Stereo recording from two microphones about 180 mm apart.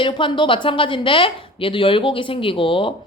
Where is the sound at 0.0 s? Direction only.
25° left (ahead or behind).